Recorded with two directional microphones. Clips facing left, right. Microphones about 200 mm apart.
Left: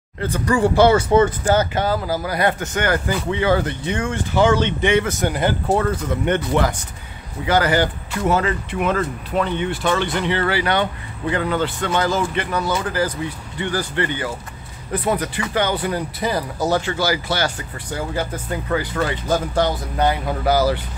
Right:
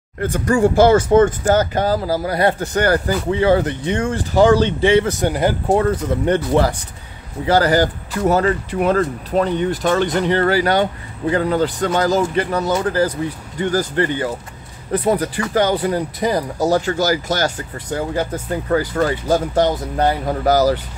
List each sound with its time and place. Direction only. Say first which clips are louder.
0.2 s speech: right 3 dB; 45° right (ahead or behind)
16.2 s speech: right 3 dB; 15° right (ahead or behind)
16.6 s speech: right 3 dB; 40° right (ahead or behind)